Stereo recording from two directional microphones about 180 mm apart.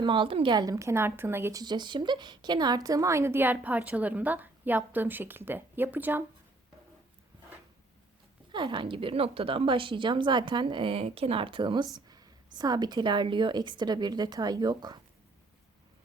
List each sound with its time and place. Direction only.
0.0 s a woman's voice: 25° right (ahead or behind); by 6.2 s 10° right (ahead or behind)
8.5 s a woman's voice: 25° right (ahead or behind)